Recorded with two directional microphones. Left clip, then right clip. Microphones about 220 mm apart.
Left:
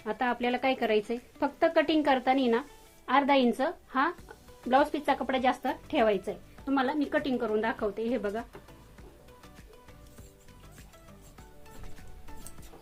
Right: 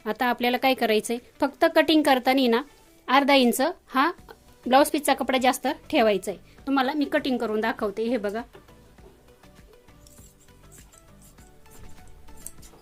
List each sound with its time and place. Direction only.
0.0 s speech: 45° right (ahead or behind)